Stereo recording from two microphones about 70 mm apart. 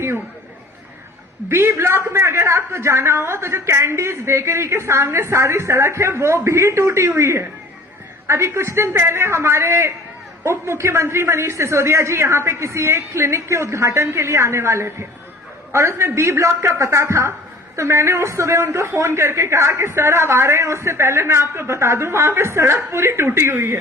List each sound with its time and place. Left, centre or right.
1.5 s a man's voice: right